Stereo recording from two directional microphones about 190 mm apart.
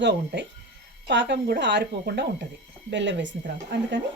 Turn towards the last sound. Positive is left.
turn(degrees=-70)  # may be behind; listen again after turning